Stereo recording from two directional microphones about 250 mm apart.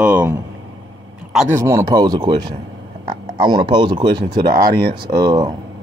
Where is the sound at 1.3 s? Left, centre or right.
Centre.